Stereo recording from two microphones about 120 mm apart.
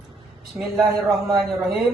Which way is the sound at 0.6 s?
20° right (ahead or behind).